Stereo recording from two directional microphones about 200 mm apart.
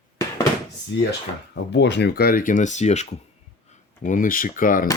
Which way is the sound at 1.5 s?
60° left (ahead or behind).